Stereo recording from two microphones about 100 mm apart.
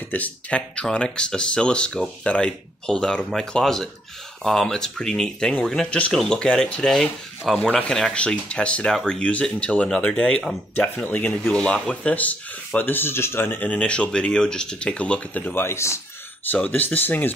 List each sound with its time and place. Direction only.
0.1 s speech: 15° left (ahead or behind)
11.1 s speech: 20° left (ahead or behind)
16.4 s speech: 15° left (ahead or behind)